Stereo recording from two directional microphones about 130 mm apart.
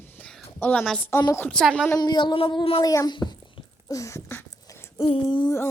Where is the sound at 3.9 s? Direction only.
25° left (ahead or behind).